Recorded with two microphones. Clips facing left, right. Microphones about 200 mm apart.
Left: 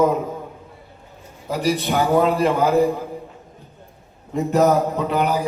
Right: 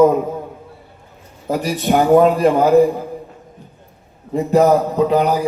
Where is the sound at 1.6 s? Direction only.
50° right (ahead or behind).